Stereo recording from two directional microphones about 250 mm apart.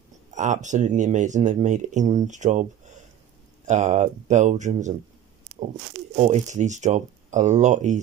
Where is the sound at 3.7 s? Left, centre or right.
Right.